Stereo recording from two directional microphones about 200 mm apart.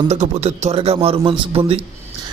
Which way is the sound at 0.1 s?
35° right (ahead or behind).